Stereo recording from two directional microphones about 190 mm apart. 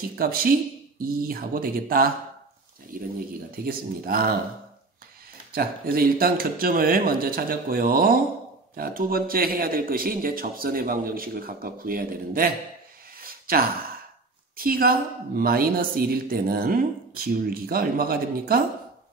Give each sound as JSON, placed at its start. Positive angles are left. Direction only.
{"t": 0.1, "sound": "speech", "side_deg": -50}
{"t": 5.5, "sound": "speech", "side_deg": -50}
{"t": 13.2, "sound": "a sound", "side_deg": -50}
{"t": 14.6, "sound": "speech", "side_deg": -50}